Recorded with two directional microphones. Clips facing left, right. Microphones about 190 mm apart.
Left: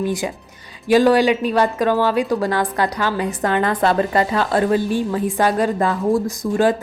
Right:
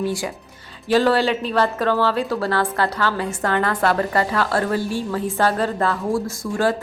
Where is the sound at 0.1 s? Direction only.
20° left (ahead or behind).